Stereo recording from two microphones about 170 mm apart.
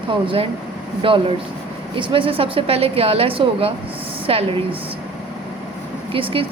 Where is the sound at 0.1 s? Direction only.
30° right (ahead or behind).